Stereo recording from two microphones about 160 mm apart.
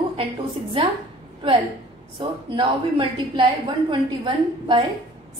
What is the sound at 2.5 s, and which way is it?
Speech, 30° right (ahead or behind).